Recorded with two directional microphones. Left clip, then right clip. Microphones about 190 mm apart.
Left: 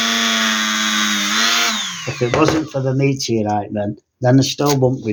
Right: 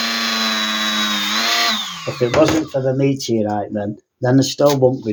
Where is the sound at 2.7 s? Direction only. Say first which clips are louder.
Right 1 dB; 30° left (ahead or behind).